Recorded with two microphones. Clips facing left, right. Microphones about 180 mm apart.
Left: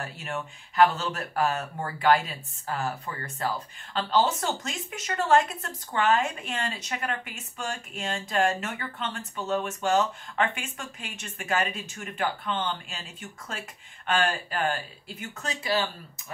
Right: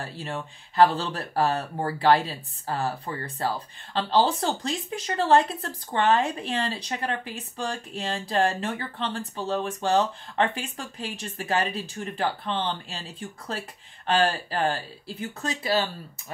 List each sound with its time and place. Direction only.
0.0 s speech: 30° right (ahead or behind)